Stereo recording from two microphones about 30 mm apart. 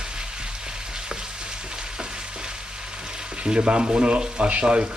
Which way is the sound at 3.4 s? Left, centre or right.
Right.